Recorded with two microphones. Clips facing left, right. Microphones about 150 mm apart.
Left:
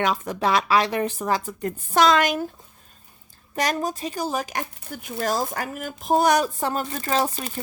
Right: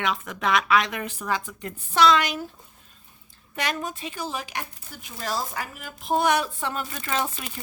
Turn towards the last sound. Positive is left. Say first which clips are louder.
# left 5 dB
turn(degrees=35)  # may be behind; listen again after turning